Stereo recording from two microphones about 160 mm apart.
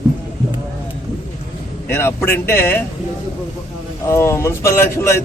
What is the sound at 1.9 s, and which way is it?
Speech, 15° left (ahead or behind).